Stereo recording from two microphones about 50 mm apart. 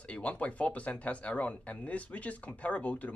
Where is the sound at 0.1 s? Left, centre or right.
Left.